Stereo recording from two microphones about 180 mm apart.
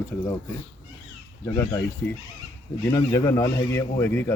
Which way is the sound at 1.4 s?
15° left (ahead or behind).